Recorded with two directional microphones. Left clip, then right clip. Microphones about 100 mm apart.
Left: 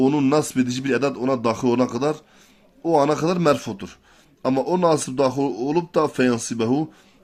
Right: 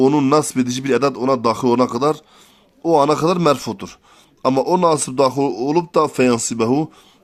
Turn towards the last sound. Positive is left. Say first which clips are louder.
# right 4 dB
turn(degrees=-55)  # may be behind; listen again after turning